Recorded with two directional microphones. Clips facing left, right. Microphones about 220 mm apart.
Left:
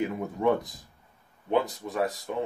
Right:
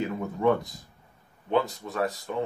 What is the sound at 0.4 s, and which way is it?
Speech, 20° left (ahead or behind).